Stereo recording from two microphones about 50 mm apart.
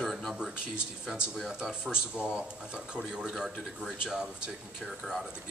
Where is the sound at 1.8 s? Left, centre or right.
Centre.